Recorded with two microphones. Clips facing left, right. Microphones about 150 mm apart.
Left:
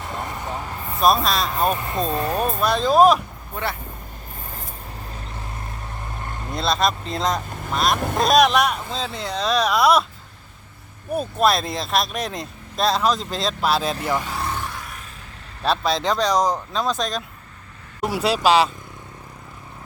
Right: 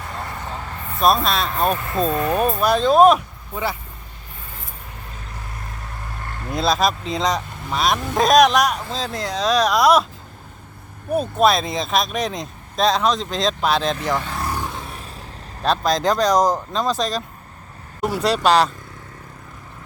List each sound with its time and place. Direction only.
0.9 s speech: centre (ahead or behind)
1.8 s speech: 20° left (ahead or behind)
2.4 s speech: 5° right (ahead or behind)
6.5 s speech: centre (ahead or behind)
11.1 s speech: centre (ahead or behind)
14.4 s vehicle: 10° right (ahead or behind)
14.7 s a sound: 25° right (ahead or behind)
15.6 s speech: centre (ahead or behind)